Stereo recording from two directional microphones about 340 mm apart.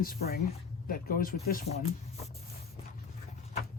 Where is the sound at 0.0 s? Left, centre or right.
Left.